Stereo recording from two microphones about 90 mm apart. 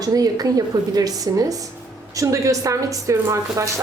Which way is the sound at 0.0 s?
45° right (ahead or behind).